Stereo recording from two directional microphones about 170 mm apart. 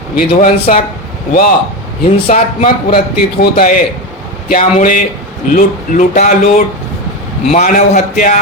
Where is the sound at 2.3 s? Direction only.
50° left (ahead or behind).